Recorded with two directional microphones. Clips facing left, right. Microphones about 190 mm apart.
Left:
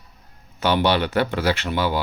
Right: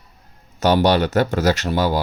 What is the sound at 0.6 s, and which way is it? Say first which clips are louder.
Speech: right 4 dB; 40° right (ahead or behind).